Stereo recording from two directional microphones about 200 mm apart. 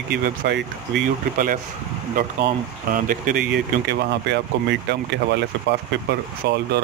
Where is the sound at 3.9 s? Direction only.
55° right (ahead or behind).